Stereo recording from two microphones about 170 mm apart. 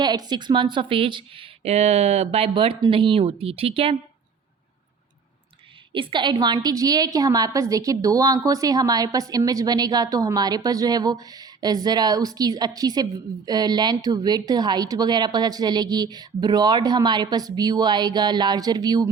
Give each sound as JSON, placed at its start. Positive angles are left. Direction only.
{"t": 0.0, "sound": "speech", "side_deg": -25}
{"t": 5.9, "sound": "a woman's voice", "side_deg": -30}